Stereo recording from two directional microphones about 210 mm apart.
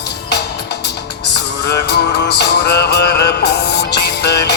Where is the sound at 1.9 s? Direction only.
55° left (ahead or behind).